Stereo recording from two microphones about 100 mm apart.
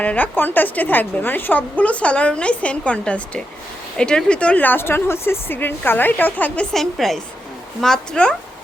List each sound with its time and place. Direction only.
0.0 s a woman's voice: 15° left (ahead or behind)
6.7 s a woman's voice: centre (ahead or behind)